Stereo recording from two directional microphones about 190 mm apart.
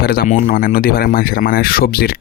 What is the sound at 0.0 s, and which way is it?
Speech, 50° left (ahead or behind).